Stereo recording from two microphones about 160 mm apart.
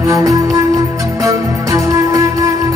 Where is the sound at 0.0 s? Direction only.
20° right (ahead or behind).